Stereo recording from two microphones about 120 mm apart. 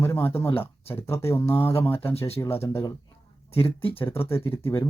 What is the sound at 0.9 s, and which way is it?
Speech, 20° left (ahead or behind).